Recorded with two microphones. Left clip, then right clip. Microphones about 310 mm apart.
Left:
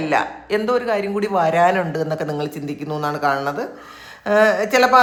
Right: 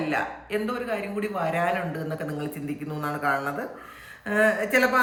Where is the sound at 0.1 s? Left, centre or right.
Centre.